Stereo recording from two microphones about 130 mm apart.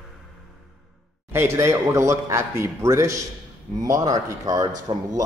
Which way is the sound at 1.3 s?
20° right (ahead or behind).